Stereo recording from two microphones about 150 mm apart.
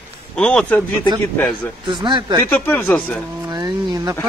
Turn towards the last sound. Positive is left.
turn(degrees=-25)  # may be behind; listen again after turning